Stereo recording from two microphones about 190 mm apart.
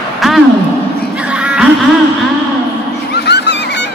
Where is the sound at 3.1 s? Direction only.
60° left (ahead or behind).